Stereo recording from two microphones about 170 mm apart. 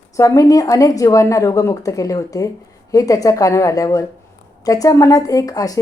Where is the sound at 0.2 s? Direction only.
20° left (ahead or behind).